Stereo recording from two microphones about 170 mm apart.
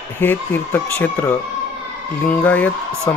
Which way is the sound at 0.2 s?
10° left (ahead or behind).